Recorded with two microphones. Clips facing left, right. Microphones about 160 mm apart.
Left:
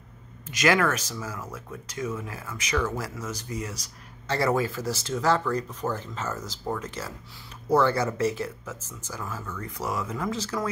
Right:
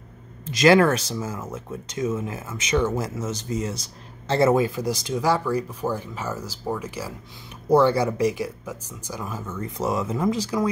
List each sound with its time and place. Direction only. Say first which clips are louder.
0.5 s speech: right 7 dB; 30° right (ahead or behind); by 10.7 s 15° right (ahead or behind)